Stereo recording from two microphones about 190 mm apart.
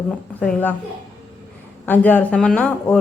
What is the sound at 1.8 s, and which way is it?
Speech, 10° left (ahead or behind).